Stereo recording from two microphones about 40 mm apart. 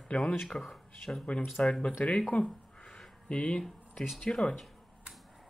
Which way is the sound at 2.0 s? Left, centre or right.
Left.